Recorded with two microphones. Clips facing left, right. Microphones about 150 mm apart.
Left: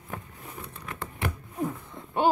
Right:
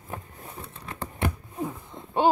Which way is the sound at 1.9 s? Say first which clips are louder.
Right 4 dB; 20° right (ahead or behind).